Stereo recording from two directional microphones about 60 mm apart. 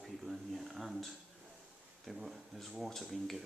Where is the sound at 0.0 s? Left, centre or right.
Centre.